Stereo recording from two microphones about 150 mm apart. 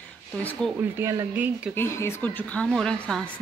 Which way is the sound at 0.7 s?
15° right (ahead or behind).